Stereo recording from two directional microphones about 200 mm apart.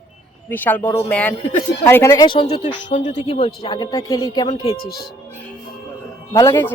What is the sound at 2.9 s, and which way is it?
Speech, 35° left (ahead or behind).